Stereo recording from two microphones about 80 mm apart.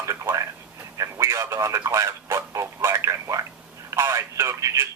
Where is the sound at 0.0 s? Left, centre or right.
Right.